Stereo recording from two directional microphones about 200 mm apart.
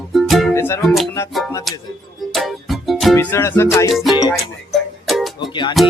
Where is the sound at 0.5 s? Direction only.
10° left (ahead or behind).